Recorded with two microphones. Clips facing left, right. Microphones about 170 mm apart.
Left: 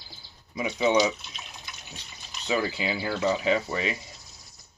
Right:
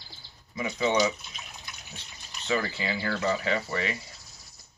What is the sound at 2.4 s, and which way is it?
Speech, 15° left (ahead or behind).